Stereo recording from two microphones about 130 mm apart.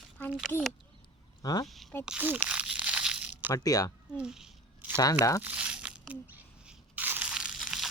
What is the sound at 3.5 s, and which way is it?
Speech, 30° left (ahead or behind).